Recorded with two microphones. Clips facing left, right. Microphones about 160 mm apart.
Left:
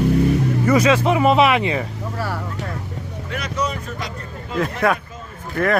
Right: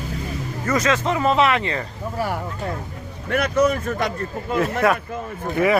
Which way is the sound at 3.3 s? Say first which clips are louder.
Right 7 dB; 55° right (ahead or behind).